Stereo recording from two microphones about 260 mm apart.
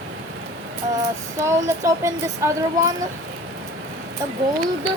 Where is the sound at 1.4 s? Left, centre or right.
Centre.